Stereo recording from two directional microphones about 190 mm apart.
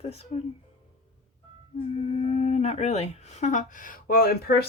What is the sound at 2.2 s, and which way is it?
Speech, 30° left (ahead or behind).